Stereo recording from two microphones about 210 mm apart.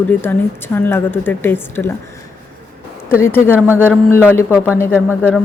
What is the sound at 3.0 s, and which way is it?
Speech, 10° left (ahead or behind).